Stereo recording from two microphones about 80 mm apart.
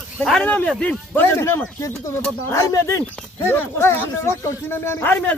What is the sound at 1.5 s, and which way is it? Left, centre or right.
Speech, left.